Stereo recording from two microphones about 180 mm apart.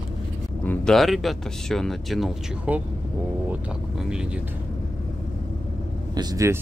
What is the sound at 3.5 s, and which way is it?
Vehicle, 5° right (ahead or behind).